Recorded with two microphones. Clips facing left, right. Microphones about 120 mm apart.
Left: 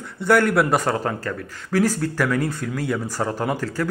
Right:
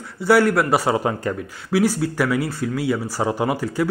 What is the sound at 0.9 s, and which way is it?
A man's voice, 10° right (ahead or behind).